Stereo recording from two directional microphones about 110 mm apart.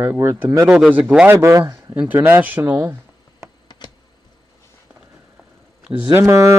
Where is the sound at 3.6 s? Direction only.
40° left (ahead or behind).